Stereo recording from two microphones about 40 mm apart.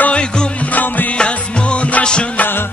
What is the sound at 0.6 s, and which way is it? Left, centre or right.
Music, left.